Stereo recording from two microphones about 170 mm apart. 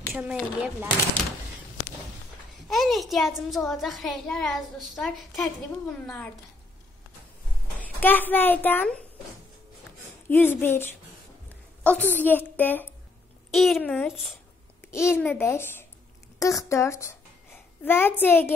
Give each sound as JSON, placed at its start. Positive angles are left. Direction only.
{"t": 0.1, "sound": "speech", "side_deg": -10}
{"t": 2.7, "sound": "a child's voice", "side_deg": 0}
{"t": 7.8, "sound": "a child's voice", "side_deg": 10}
{"t": 10.2, "sound": "a woman's voice", "side_deg": 10}